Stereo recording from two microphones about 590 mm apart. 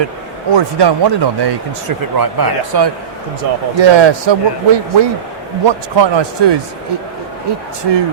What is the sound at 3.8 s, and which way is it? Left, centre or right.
Speech, right.